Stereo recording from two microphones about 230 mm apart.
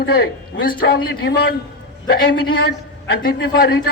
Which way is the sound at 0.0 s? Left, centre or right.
Left.